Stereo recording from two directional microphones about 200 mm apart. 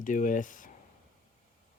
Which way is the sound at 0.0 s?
40° left (ahead or behind).